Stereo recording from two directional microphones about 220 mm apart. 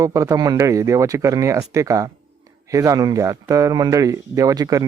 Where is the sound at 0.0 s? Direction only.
15° right (ahead or behind).